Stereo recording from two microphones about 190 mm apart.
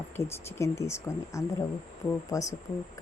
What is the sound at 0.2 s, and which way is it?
A woman's voice, 15° left (ahead or behind).